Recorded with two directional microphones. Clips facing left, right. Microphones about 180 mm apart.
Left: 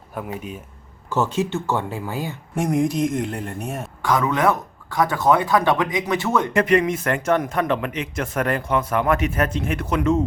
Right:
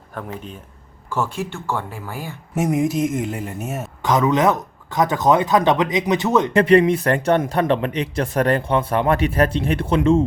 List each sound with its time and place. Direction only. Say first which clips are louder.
0.3 s speech: left 2 dB; 10° left (ahead or behind)
1.1 s speech: left 3 dB; 20° left (ahead or behind)
2.6 s speech: right 1 dB; 5° right (ahead or behind)
4.0 s speech: right 3 dB; 20° right (ahead or behind)
6.5 s speech: right 6 dB; 30° right (ahead or behind)